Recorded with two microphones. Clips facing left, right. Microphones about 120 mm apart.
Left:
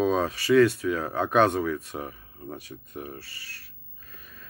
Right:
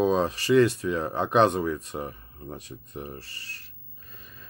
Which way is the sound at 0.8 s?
15° right (ahead or behind).